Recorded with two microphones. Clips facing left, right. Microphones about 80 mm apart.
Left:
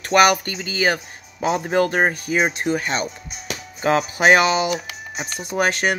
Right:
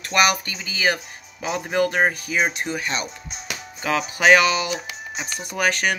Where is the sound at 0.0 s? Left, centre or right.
Left.